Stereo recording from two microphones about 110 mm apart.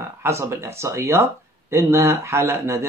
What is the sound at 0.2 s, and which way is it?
A man's voice, 25° right (ahead or behind).